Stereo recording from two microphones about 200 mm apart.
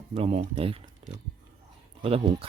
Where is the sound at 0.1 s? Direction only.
30° right (ahead or behind).